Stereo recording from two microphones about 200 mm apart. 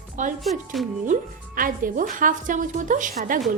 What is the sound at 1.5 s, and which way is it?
A woman's voice, 45° right (ahead or behind).